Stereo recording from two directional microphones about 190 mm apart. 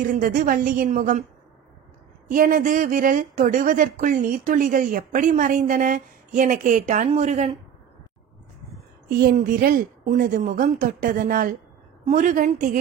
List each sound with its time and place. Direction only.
0.1 s speech: 45° right (ahead or behind)
2.2 s speech: 45° right (ahead or behind)
9.1 s speech: 50° right (ahead or behind)